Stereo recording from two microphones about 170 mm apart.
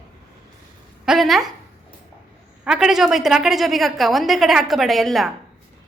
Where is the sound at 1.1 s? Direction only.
Centre (ahead or behind).